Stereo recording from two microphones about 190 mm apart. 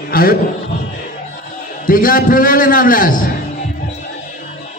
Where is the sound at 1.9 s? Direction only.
50° left (ahead or behind).